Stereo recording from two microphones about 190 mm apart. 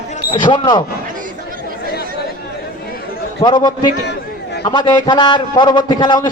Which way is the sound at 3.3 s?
25° left (ahead or behind).